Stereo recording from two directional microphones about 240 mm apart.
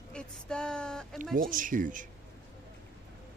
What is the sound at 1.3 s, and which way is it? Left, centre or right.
Speech, right.